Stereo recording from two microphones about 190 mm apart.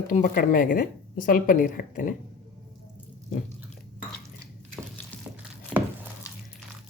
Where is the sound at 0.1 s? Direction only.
45° left (ahead or behind).